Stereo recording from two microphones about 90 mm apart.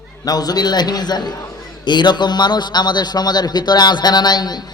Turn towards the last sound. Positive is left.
turn(degrees=50)  # may be behind; listen again after turning